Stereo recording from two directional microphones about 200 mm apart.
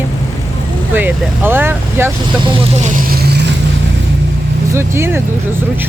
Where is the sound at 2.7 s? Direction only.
40° right (ahead or behind).